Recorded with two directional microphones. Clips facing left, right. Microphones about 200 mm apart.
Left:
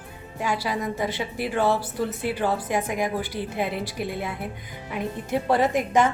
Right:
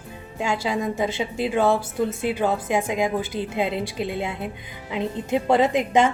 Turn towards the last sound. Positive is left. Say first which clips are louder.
# right 2 dB
turn(degrees=-25)  # may be behind; listen again after turning